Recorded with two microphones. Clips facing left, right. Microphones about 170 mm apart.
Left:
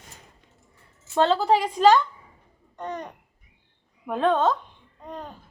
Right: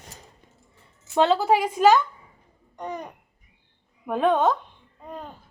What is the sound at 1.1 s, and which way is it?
A child's voice, 10° right (ahead or behind).